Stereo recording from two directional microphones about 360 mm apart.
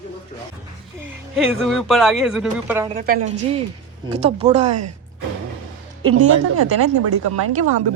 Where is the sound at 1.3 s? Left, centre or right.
Centre.